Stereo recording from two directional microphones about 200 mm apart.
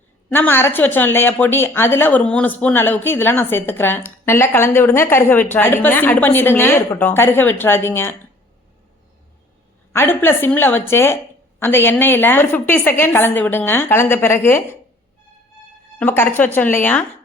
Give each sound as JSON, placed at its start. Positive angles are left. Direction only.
{"t": 0.3, "sound": "speech", "side_deg": 10}
{"t": 9.9, "sound": "speech", "side_deg": 10}
{"t": 16.0, "sound": "speech", "side_deg": 10}